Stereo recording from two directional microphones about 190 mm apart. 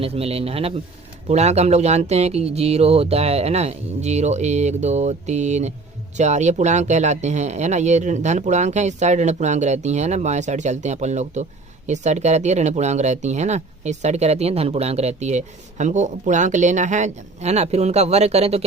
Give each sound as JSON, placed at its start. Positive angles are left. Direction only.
{"t": 0.0, "sound": "speech", "side_deg": -30}